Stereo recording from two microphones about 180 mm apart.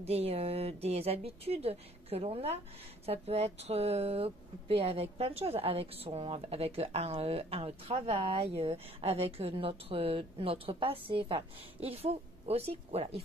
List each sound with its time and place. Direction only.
0.0 s speech: 35° right (ahead or behind)